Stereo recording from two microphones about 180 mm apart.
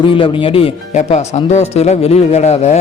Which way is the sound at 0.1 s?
30° left (ahead or behind).